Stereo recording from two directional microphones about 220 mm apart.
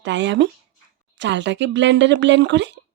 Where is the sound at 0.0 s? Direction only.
55° right (ahead or behind).